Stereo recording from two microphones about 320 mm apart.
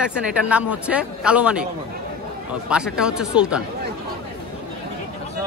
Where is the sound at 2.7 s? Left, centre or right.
Centre.